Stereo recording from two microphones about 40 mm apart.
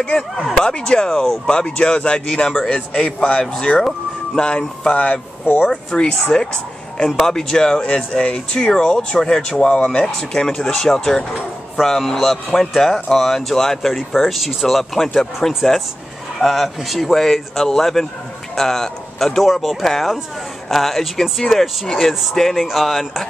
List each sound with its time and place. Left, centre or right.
0.7 s speech: left
1.5 s speech: left
5.6 s a woman's voice: centre
7.9 s speech: left
8.5 s speech: centre
10.0 s a man's voice: centre